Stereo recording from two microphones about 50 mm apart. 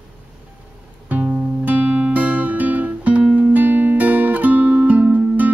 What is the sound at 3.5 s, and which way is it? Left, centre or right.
Music, right.